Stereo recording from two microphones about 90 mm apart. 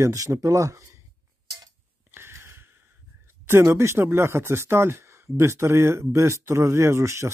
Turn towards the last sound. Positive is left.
turn(degrees=-35)  # may be behind; listen again after turning